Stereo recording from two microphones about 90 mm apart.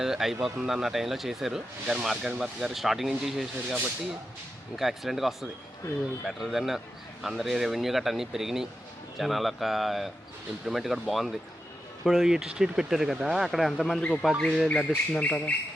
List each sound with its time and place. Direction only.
0.0 s speech: 5° right (ahead or behind)
4.8 s speech: centre (ahead or behind)
14.0 s speech: 15° left (ahead or behind)
14.3 s speech: centre (ahead or behind)
15.2 s speech: 15° left (ahead or behind)